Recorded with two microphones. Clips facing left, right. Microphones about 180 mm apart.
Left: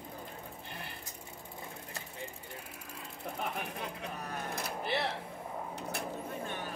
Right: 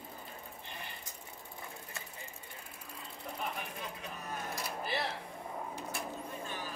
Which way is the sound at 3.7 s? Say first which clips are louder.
Left 3 dB; 65° left (ahead or behind).